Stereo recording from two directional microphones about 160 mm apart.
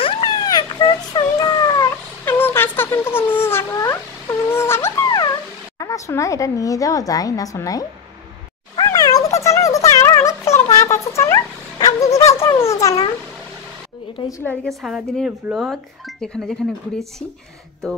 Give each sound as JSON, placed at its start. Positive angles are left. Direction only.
{"t": 0.0, "sound": "a sound", "side_deg": 30}
{"t": 2.2, "sound": "a sound", "side_deg": 15}
{"t": 5.8, "sound": "a woman's voice", "side_deg": 20}
{"t": 8.7, "sound": "cat", "side_deg": 25}
{"t": 10.7, "sound": "music", "side_deg": 20}
{"t": 12.4, "sound": "a woman's voice", "side_deg": 15}
{"t": 14.4, "sound": "speech", "side_deg": 10}